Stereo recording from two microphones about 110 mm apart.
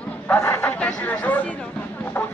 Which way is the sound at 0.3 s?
15° left (ahead or behind).